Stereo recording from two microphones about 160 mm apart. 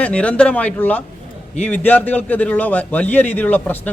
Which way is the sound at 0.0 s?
5° left (ahead or behind).